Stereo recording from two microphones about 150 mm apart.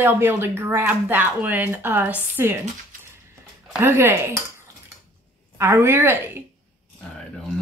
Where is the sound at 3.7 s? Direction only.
15° right (ahead or behind).